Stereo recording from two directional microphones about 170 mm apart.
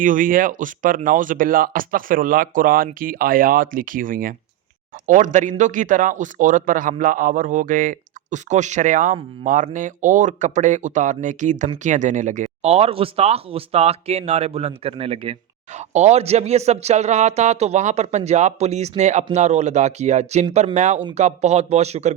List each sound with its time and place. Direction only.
0.0 s speech: 50° right (ahead or behind)